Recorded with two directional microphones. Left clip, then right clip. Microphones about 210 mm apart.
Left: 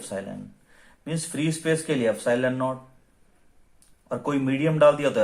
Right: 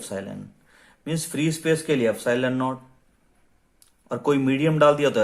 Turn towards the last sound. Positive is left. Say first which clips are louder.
# right 1 dB
turn(degrees=-35)  # may be behind; listen again after turning